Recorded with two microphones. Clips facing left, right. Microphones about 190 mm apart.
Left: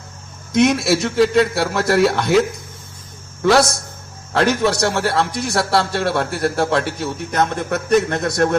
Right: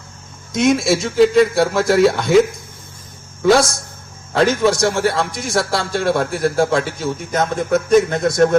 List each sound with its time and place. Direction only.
0.5 s a man's voice: 65° left (ahead or behind)
4.4 s a man's voice: 65° left (ahead or behind)